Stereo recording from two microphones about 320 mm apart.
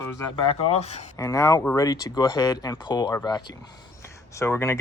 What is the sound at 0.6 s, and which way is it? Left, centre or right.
Speech, centre.